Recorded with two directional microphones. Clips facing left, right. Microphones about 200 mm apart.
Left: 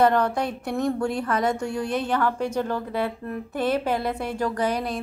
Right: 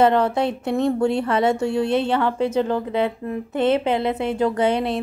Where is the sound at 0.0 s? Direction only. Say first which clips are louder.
Right 3 dB; 25° right (ahead or behind).